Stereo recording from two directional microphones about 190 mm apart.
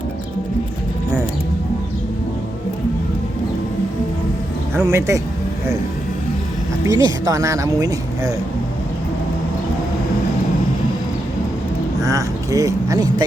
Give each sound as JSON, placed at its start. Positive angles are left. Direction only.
{"t": 4.7, "sound": "speech", "side_deg": -15}
{"t": 6.8, "sound": "speech", "side_deg": -20}
{"t": 12.0, "sound": "speech", "side_deg": -15}